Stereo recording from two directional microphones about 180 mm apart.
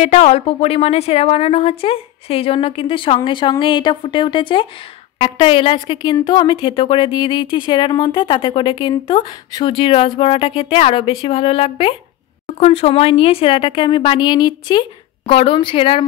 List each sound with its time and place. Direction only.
0.0 s a woman's voice: 35° left (ahead or behind)